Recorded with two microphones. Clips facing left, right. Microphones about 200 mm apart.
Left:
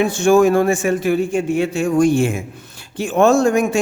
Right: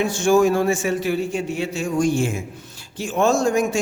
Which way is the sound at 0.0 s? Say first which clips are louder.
Left 4 dB; 60° left (ahead or behind).